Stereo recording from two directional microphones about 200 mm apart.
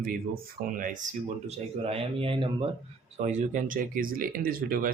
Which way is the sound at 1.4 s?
30° right (ahead or behind).